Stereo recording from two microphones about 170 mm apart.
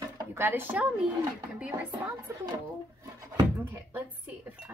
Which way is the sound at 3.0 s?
20° right (ahead or behind).